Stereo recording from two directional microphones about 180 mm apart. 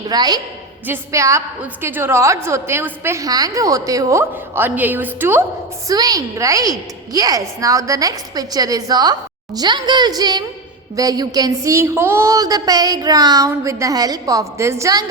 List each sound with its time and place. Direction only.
0.1 s a woman's voice: 20° right (ahead or behind)